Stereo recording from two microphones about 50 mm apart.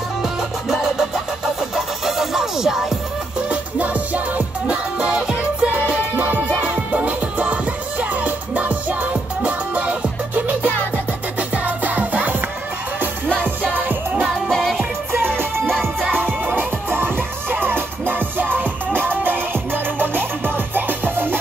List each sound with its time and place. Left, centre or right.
0.2 s music: centre
3.4 s music: right
13.4 s music: right
14.2 s music: centre
14.8 s music: right